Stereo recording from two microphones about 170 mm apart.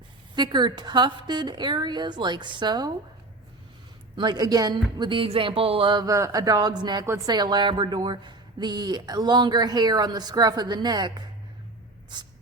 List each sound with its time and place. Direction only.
0.3 s speech: 25° right (ahead or behind)
4.2 s speech: 25° right (ahead or behind)